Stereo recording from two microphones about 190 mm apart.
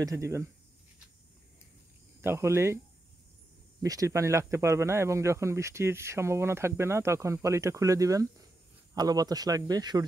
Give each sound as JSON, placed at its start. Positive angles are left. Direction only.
{"t": 0.0, "sound": "speech", "side_deg": -15}
{"t": 2.2, "sound": "speech", "side_deg": -15}
{"t": 3.8, "sound": "speech", "side_deg": -20}